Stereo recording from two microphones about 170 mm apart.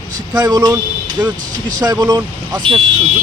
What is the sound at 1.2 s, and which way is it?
Speech, 10° right (ahead or behind).